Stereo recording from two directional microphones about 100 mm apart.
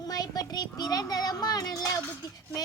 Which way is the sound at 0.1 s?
40° left (ahead or behind).